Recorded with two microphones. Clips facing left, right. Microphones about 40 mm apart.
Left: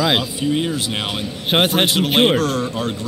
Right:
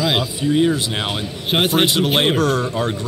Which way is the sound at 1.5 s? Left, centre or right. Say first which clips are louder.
Left 2 dB; left.